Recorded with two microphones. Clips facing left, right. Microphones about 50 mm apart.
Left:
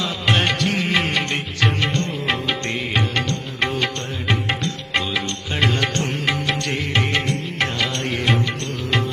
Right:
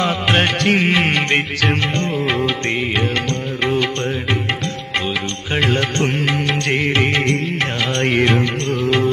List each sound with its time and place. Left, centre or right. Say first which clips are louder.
0.0 s music: right 4 dB; right
0.7 s music: right 5 dB; right
2.0 s music of bollywood: right 4 dB; right
5.5 s music: right 3 dB; right